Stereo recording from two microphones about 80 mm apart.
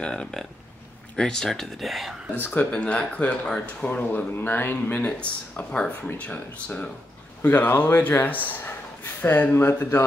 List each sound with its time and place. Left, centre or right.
0.0 s speech: centre
2.4 s speech: left